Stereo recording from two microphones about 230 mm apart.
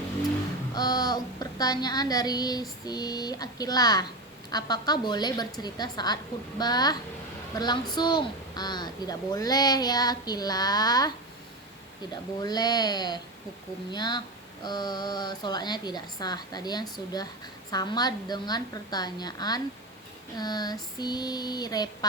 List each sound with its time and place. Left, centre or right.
0.7 s a woman's voice: centre
12.4 s a woman's voice: centre